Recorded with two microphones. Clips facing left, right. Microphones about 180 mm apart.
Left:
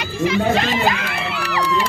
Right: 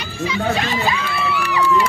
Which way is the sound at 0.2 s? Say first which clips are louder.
Left 3 dB; 50° left (ahead or behind).